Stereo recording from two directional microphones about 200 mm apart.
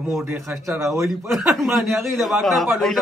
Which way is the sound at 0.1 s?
10° right (ahead or behind).